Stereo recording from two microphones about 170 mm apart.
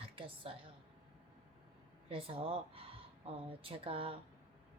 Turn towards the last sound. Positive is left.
turn(degrees=-35)  # may be behind; listen again after turning